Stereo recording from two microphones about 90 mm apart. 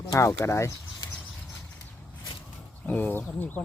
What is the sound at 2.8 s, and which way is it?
Speech, 20° left (ahead or behind).